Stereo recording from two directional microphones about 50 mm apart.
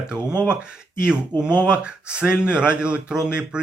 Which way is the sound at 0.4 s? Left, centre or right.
Centre.